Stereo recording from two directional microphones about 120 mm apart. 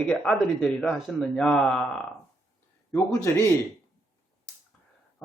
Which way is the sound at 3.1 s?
25° left (ahead or behind).